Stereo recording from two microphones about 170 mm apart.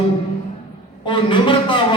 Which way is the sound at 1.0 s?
30° left (ahead or behind).